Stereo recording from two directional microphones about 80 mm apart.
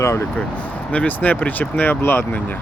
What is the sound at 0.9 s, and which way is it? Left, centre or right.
Speech, centre.